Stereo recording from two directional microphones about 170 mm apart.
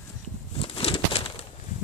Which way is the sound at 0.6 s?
30° left (ahead or behind).